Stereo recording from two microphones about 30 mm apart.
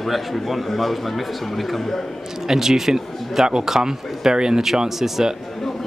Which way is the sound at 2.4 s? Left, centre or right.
Centre.